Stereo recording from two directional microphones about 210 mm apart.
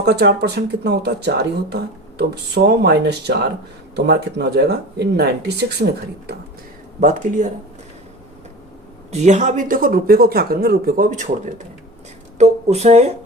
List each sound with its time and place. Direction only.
0.0 s speech: 50° right (ahead or behind)
7.0 s speech: 40° right (ahead or behind)
9.1 s speech: 35° right (ahead or behind)